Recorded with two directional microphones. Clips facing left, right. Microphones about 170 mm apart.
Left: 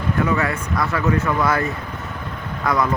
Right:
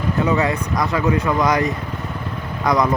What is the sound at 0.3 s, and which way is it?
Speech, 20° right (ahead or behind).